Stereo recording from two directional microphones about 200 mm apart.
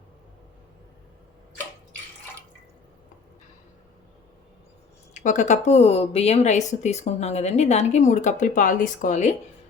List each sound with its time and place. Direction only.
5.1 s speech: 40° left (ahead or behind)